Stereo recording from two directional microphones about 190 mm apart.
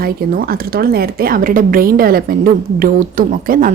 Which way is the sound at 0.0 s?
50° right (ahead or behind).